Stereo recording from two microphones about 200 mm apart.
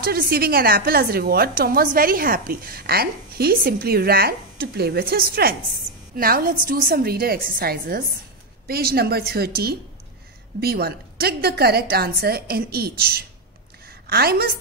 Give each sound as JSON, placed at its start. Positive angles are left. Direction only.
{"t": 0.0, "sound": "a woman's voice", "side_deg": -50}